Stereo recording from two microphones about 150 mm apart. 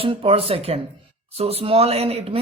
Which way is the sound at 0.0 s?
40° right (ahead or behind).